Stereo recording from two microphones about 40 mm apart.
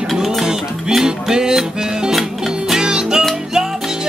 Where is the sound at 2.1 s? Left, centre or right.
Centre.